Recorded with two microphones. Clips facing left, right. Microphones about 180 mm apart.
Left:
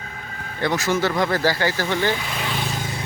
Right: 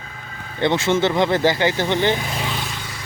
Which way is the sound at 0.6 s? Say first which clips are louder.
Right 3 dB; 25° right (ahead or behind).